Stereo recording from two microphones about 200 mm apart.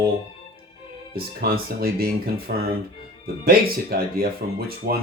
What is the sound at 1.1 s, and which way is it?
Speech, 50° right (ahead or behind).